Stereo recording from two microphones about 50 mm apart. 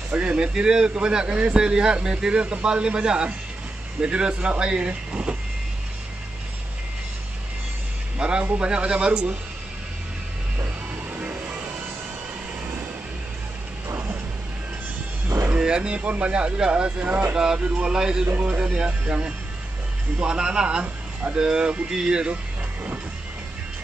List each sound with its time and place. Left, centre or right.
0.1 s a man's voice: right
8.2 s a man's voice: right
11.1 s music: right
15.5 s a man's voice: right
17.4 s speech: centre
18.2 s a man's voice: right
20.8 s a man's voice: right